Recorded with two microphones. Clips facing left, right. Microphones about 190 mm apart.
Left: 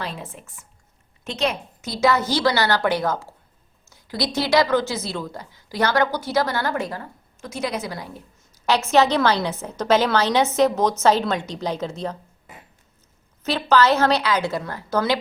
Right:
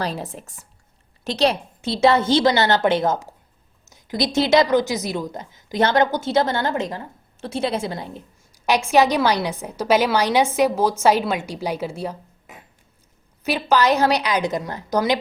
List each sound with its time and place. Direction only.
0.0 s a woman's voice: 40° right (ahead or behind)
8.5 s a woman's voice: 15° right (ahead or behind)
13.4 s a woman's voice: 15° right (ahead or behind)